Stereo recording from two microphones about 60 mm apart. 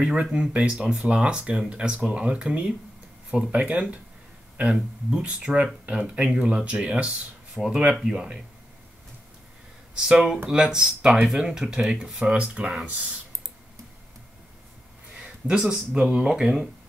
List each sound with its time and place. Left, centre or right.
0.0 s speech: centre
9.9 s speech: centre
12.4 s speech: centre
15.1 s a sound: centre
15.6 s speech: centre